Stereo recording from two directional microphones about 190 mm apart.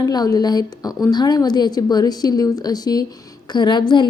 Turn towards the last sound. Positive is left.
turn(degrees=25)  # may be behind; listen again after turning